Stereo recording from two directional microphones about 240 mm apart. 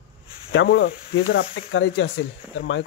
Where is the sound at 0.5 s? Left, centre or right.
Left.